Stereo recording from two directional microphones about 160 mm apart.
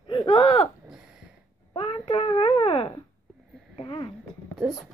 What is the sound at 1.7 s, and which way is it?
A child's voice, 35° left (ahead or behind).